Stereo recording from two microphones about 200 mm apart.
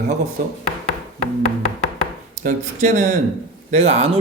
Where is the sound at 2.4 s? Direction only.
40° right (ahead or behind).